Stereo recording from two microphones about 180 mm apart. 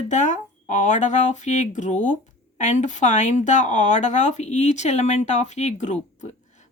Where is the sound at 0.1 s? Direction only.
45° left (ahead or behind).